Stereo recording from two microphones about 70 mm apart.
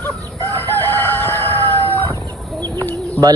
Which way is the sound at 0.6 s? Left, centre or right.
Left.